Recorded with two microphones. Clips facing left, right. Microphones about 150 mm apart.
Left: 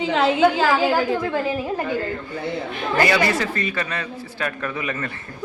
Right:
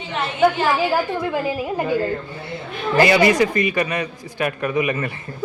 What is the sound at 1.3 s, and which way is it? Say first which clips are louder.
Speech: even; 15° right (ahead or behind).